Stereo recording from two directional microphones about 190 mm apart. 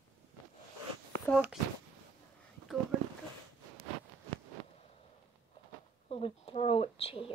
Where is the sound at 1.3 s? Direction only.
10° left (ahead or behind).